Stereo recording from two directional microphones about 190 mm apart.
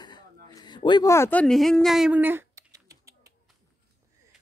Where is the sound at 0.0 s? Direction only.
20° left (ahead or behind); by 3.3 s 15° right (ahead or behind).